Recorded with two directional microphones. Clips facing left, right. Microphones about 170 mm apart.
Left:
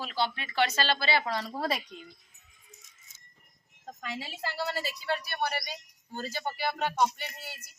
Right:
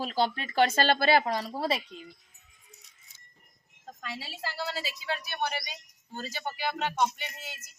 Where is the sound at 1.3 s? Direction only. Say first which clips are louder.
Right 2 dB; 10° right (ahead or behind).